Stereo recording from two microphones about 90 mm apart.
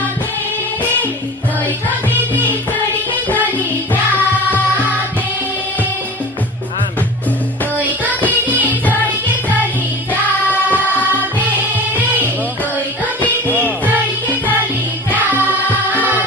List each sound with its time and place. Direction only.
10.1 s music: 20° left (ahead or behind)